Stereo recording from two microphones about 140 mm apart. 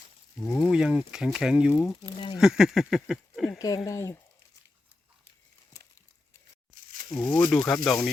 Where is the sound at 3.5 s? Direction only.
25° left (ahead or behind).